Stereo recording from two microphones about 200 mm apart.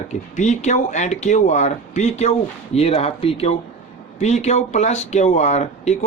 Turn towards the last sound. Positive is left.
turn(degrees=35)  # may be behind; listen again after turning